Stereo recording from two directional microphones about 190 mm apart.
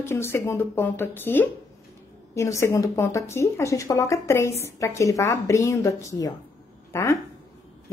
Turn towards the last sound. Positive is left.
turn(degrees=15)  # may be behind; listen again after turning